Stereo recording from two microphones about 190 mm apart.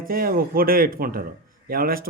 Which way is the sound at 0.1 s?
50° right (ahead or behind).